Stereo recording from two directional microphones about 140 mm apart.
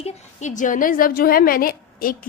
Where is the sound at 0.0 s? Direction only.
60° left (ahead or behind).